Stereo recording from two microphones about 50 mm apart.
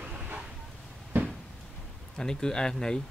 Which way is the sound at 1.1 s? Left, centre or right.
Right.